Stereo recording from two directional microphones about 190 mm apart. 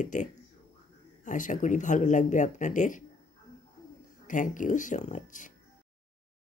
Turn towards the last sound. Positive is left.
turn(degrees=40)  # may be behind; listen again after turning